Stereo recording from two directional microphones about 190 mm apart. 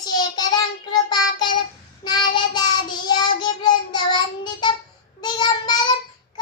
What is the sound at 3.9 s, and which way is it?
Child singing, 25° left (ahead or behind).